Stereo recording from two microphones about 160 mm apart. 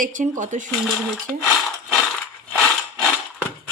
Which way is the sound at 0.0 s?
55° right (ahead or behind).